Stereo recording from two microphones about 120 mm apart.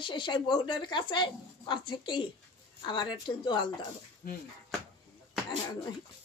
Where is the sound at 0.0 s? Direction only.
40° left (ahead or behind).